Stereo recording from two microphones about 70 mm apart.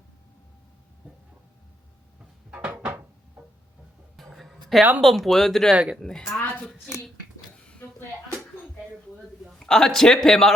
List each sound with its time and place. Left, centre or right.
2.5 s drawer open or close: centre
3.4 s music: centre
4.2 s a sound: centre
4.9 s speech: centre
5.7 s speech: centre
6.0 s speech: centre
7.5 s a sound: centre
9.6 s speech: centre